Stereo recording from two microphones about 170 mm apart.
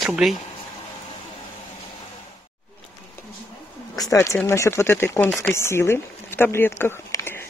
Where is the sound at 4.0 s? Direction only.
20° left (ahead or behind).